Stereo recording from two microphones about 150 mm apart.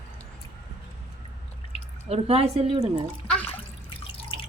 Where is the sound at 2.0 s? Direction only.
40° right (ahead or behind).